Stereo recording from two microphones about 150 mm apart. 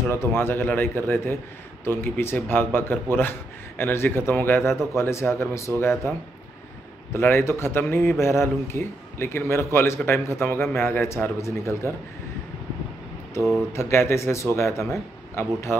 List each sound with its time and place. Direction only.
0.1 s a man's voice: 15° left (ahead or behind)
13.7 s a man's voice: 15° left (ahead or behind)